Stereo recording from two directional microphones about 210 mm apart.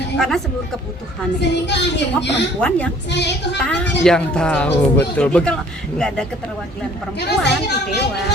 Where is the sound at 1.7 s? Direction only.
55° left (ahead or behind).